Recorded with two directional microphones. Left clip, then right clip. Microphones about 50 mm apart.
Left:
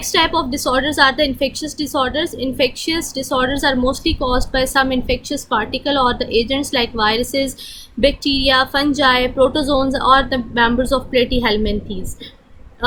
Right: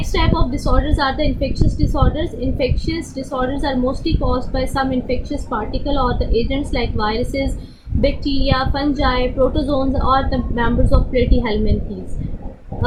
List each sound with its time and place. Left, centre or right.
0.0 s a woman's voice: left